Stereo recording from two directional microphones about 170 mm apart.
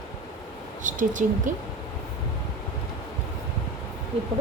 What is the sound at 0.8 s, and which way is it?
Speech, 50° right (ahead or behind).